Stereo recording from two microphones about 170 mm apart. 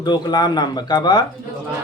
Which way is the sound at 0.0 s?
25° left (ahead or behind).